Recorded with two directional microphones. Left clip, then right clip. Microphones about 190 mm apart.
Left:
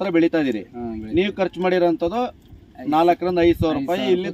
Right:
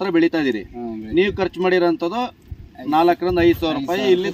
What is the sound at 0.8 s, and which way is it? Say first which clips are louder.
Speech: right 1 dB; 10° right (ahead or behind).